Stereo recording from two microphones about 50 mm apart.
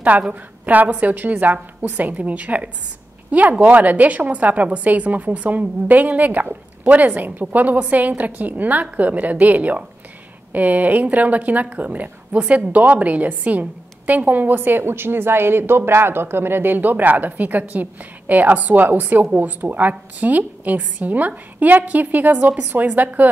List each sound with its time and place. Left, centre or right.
0.3 s a woman's voice: right